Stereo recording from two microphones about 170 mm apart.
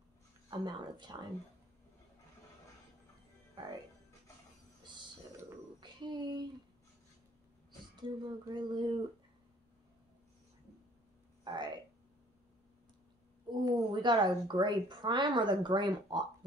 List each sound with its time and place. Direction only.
0.5 s speech: 25° right (ahead or behind)
5.8 s a sound: 25° right (ahead or behind)
7.9 s speech: 25° right (ahead or behind)
11.4 s speech: 25° right (ahead or behind)
13.7 s speech: 25° right (ahead or behind)